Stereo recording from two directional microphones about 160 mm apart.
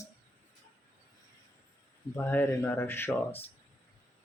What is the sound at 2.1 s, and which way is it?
Speech, 10° left (ahead or behind).